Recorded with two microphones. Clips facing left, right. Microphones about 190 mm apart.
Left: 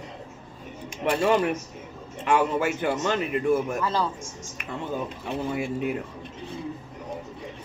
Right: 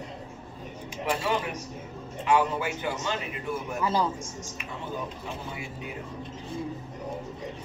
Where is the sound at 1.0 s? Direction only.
60° left (ahead or behind).